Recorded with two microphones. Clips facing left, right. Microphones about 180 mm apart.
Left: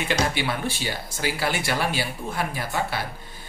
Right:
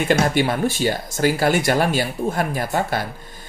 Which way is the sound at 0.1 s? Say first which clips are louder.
Right 7 dB; 45° right (ahead or behind).